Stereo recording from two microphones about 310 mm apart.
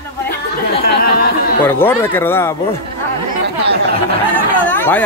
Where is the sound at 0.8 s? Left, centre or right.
Left.